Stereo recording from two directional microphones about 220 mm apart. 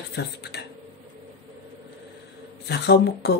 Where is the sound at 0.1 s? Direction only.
50° left (ahead or behind).